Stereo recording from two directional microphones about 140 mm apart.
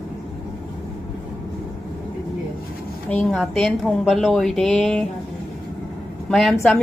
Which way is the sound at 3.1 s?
10° left (ahead or behind).